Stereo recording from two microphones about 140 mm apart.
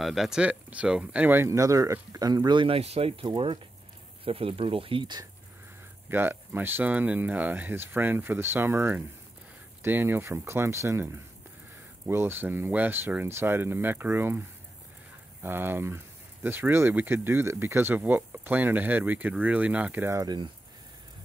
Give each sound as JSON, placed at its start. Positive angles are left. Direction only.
{"t": 0.0, "sound": "speech", "side_deg": 0}
{"t": 6.0, "sound": "speech", "side_deg": -15}
{"t": 12.1, "sound": "speech", "side_deg": -15}
{"t": 15.4, "sound": "speech", "side_deg": -15}